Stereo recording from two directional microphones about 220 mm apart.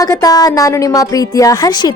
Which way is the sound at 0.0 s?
15° left (ahead or behind).